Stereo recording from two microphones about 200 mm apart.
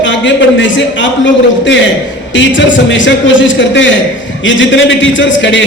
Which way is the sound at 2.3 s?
65° left (ahead or behind).